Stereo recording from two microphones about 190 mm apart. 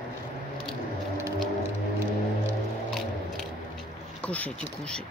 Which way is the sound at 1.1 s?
25° right (ahead or behind).